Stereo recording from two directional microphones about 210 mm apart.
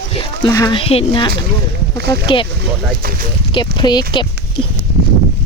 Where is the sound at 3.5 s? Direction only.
20° left (ahead or behind).